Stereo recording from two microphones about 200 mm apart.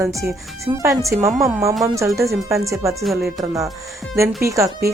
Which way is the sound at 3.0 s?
Centre (ahead or behind).